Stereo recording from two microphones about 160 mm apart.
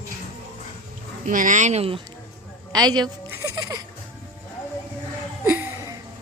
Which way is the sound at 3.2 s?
20° right (ahead or behind).